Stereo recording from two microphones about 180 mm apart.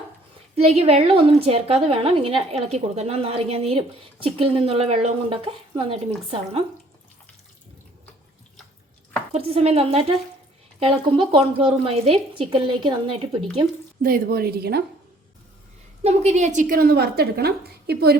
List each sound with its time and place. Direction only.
0.5 s a woman's voice: 35° right (ahead or behind)
9.3 s a woman's voice: 35° right (ahead or behind)
14.0 s a woman's voice: 55° right (ahead or behind)
16.0 s a woman's voice: 40° right (ahead or behind); by 18.2 s 60° right (ahead or behind)